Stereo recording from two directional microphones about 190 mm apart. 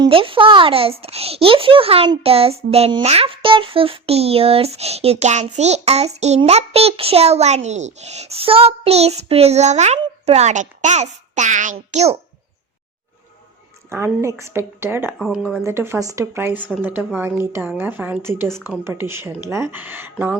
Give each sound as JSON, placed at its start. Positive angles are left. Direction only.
{"t": 0.0, "sound": "a child's voice", "side_deg": -30}
{"t": 13.9, "sound": "speech", "side_deg": -15}
{"t": 15.2, "sound": "speech", "side_deg": 0}
{"t": 15.6, "sound": "speech", "side_deg": -15}